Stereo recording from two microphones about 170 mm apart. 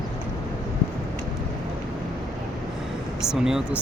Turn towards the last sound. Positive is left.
turn(degrees=-5)  # may be behind; listen again after turning